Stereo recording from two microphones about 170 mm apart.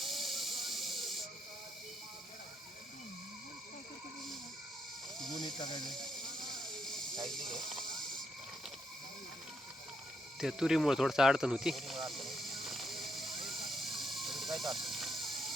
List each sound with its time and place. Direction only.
0.0 s hiss: centre (ahead or behind)
5.4 s a sound: 25° left (ahead or behind)
5.8 s snake: centre (ahead or behind)
10.4 s snake: 5° right (ahead or behind)